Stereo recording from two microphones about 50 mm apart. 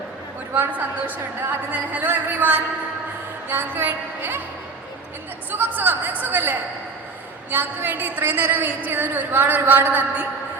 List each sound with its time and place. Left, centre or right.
0.5 s a woman's voice: right
5.5 s a woman's voice: right